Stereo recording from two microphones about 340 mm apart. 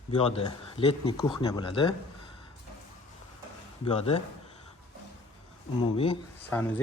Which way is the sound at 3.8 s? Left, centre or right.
Centre.